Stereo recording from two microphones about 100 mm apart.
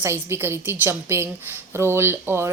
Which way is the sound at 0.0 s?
25° right (ahead or behind).